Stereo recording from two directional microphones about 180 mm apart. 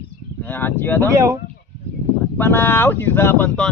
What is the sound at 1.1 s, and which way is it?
Speech, 15° right (ahead or behind).